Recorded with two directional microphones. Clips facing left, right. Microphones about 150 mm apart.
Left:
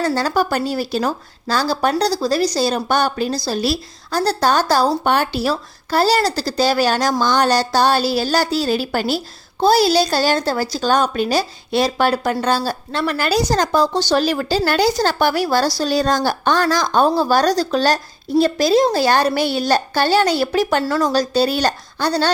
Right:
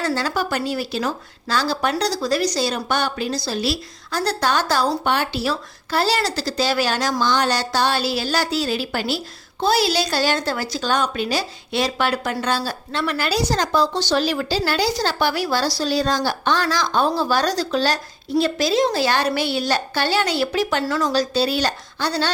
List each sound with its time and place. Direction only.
0.0 s a woman's voice: 40° left (ahead or behind)